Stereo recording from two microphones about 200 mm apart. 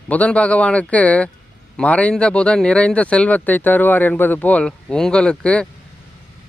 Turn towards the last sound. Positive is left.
turn(degrees=5)  # may be behind; listen again after turning